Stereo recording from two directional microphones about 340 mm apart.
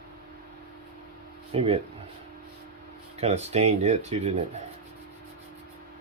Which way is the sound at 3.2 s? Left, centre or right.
Centre.